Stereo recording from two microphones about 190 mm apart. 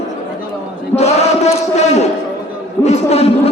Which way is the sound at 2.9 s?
35° left (ahead or behind).